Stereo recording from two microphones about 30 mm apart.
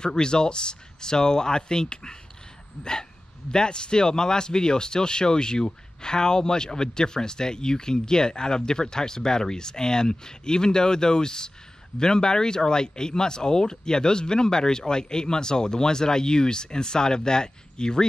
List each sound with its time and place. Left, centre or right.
0.0 s speech: left